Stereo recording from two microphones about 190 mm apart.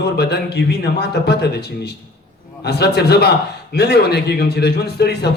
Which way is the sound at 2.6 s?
60° left (ahead or behind).